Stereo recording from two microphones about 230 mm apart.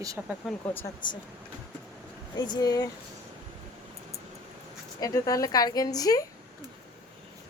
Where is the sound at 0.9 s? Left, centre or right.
Centre.